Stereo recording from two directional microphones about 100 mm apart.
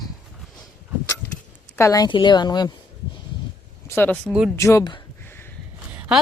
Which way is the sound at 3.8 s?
20° left (ahead or behind).